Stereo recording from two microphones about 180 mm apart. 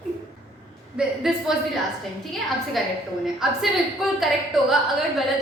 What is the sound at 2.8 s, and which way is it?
A woman's voice, centre (ahead or behind).